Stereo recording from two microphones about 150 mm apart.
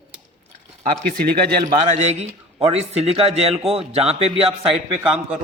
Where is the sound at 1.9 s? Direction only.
50° right (ahead or behind).